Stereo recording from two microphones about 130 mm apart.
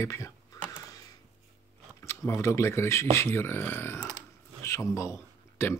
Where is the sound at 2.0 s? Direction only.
20° left (ahead or behind).